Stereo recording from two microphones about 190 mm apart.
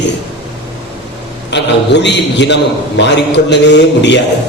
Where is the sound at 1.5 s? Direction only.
65° left (ahead or behind).